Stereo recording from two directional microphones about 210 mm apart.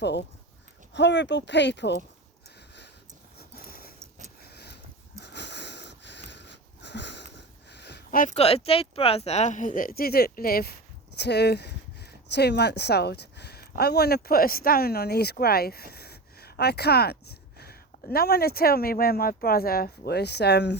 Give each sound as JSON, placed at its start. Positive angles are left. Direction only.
{"t": 0.0, "sound": "speech", "side_deg": 55}
{"t": 3.3, "sound": "a sound", "side_deg": 45}
{"t": 11.2, "sound": "speech", "side_deg": 50}